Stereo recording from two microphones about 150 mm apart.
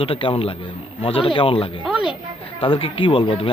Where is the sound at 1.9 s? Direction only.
5° right (ahead or behind).